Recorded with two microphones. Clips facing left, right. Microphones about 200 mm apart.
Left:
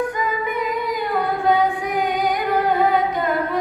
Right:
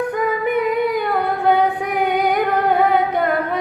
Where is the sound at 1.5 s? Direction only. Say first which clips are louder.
Right 2 dB; 60° right (ahead or behind).